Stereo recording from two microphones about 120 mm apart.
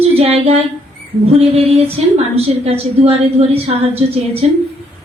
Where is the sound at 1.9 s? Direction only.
60° right (ahead or behind).